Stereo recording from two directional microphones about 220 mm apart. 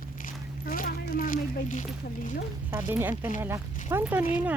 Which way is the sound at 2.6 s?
10° right (ahead or behind).